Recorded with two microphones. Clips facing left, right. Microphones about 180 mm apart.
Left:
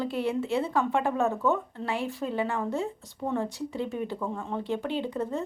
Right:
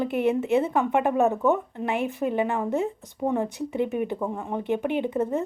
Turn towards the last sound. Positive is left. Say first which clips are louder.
# right 5 dB
turn(degrees=-20)  # may be behind; listen again after turning